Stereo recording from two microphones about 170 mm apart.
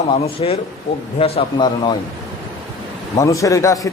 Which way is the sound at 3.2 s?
20° left (ahead or behind).